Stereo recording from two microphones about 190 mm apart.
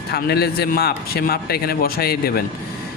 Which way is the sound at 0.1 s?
55° left (ahead or behind).